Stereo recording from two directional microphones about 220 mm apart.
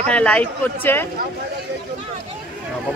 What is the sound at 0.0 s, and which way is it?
Speech, 5° left (ahead or behind).